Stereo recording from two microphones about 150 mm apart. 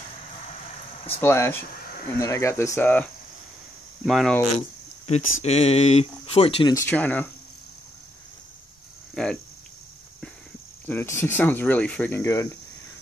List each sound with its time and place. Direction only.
1.2 s speech: 15° left (ahead or behind)
4.0 s speech: centre (ahead or behind)
4.6 s speech: 45° left (ahead or behind)
6.7 s speech: 15° left (ahead or behind)
9.1 s speech: 5° left (ahead or behind)
10.9 s speech: 15° left (ahead or behind)